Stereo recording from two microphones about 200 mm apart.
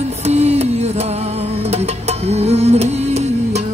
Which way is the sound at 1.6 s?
30° right (ahead or behind).